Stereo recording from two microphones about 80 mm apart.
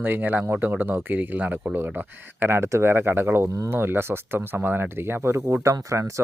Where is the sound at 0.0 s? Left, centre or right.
Right.